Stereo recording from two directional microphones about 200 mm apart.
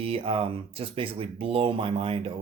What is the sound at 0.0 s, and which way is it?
Speech, 30° right (ahead or behind).